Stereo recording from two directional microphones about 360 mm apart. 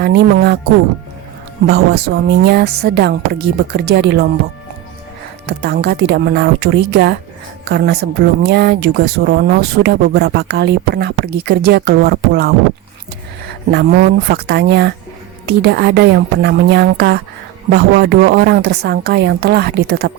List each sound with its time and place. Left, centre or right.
0.0 s speech: right
1.6 s speech: right
5.5 s speech: right
13.7 s speech: right